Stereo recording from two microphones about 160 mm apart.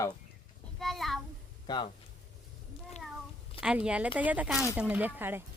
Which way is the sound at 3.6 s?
5° right (ahead or behind).